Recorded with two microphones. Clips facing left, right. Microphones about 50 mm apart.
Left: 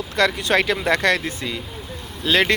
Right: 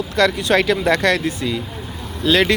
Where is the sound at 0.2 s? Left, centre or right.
Left.